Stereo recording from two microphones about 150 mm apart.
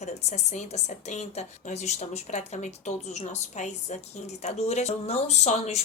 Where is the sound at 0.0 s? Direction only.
50° left (ahead or behind).